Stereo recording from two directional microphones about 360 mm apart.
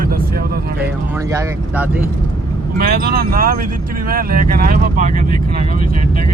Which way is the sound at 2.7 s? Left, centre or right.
Right.